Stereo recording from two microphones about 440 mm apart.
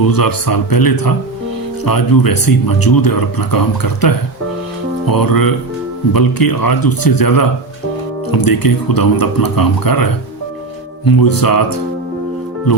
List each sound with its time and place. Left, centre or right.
0.0 s speech: left